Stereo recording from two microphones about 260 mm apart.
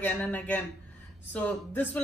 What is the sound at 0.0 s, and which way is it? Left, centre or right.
A woman's voice, centre.